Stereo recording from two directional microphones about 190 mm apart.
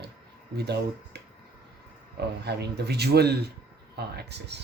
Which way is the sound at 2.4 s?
60° right (ahead or behind).